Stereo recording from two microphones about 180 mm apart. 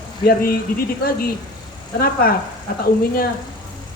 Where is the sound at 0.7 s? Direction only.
50° left (ahead or behind).